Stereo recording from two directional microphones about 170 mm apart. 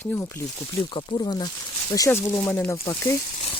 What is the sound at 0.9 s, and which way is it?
Speech, 30° left (ahead or behind).